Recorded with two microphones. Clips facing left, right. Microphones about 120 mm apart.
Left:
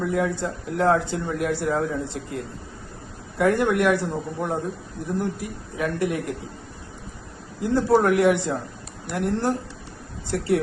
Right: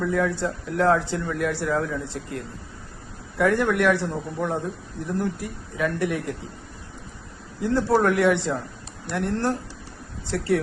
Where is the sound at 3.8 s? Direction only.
15° left (ahead or behind).